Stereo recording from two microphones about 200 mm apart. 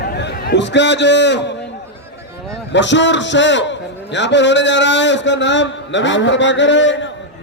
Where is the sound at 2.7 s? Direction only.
65° left (ahead or behind).